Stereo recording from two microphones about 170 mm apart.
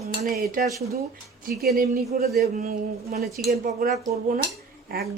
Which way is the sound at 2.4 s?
55° right (ahead or behind).